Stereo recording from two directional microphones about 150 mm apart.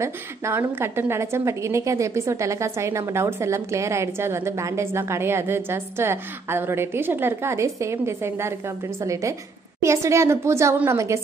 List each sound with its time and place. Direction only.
0.0 s a woman's voice: 15° right (ahead or behind)